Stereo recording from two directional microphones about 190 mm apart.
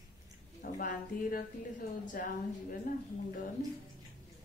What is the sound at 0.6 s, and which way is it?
Speech, 50° left (ahead or behind).